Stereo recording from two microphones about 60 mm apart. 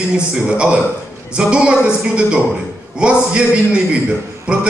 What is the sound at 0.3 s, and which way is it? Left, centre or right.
A man's voice, centre.